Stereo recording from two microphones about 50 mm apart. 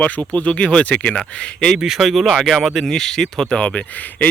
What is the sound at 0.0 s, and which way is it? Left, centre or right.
Speech, left.